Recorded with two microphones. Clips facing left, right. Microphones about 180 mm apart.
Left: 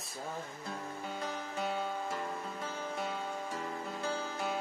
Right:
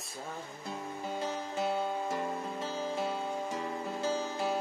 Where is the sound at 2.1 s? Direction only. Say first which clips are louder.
Right 4 dB; 30° right (ahead or behind).